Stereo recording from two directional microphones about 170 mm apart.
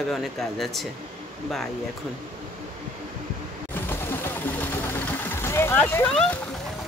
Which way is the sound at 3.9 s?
15° left (ahead or behind).